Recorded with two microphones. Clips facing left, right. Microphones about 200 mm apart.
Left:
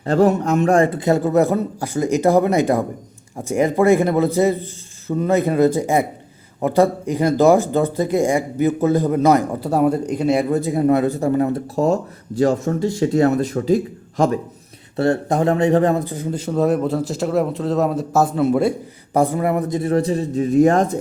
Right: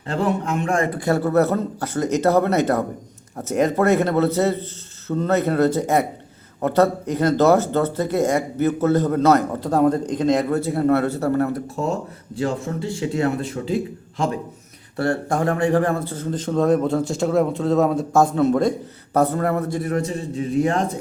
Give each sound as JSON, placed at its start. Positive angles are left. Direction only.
{"t": 0.0, "sound": "speech", "side_deg": 40}
{"t": 0.9, "sound": "speech", "side_deg": 20}
{"t": 11.8, "sound": "speech", "side_deg": 40}
{"t": 14.9, "sound": "a man's voice", "side_deg": 20}